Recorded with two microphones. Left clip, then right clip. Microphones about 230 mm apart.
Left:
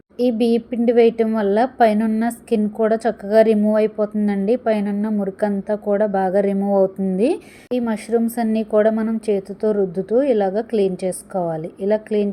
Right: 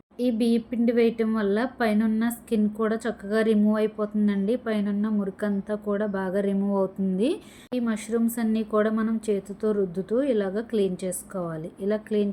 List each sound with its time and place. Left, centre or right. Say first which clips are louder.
0.2 s a woman's voice: left 7 dB; centre